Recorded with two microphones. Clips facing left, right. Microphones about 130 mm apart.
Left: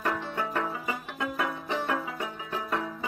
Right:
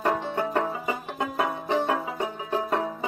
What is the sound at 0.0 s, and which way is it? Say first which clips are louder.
Music: right 5 dB; 30° right (ahead or behind).